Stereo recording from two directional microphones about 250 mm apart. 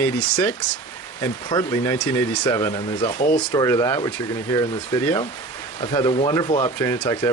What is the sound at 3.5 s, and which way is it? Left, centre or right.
Speech, centre.